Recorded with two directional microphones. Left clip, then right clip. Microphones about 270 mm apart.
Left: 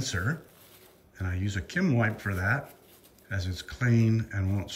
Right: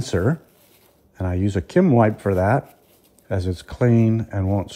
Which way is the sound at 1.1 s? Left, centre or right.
Centre.